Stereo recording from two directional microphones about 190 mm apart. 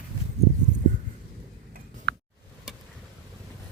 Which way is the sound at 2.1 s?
60° right (ahead or behind).